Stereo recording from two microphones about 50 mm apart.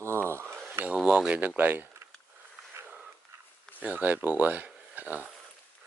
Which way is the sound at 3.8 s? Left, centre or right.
Right.